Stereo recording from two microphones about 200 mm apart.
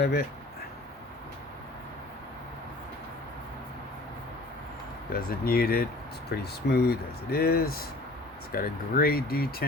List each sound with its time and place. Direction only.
0.0 s speech: 50° left (ahead or behind)
5.1 s speech: 50° left (ahead or behind)